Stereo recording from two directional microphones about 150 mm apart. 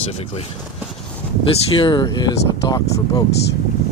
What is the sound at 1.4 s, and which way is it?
Speech, 35° left (ahead or behind).